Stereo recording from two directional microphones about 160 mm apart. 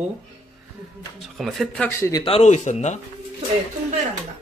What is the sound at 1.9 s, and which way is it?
Speech, 15° left (ahead or behind).